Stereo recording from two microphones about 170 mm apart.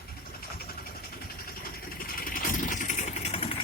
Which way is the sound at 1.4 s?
60° left (ahead or behind).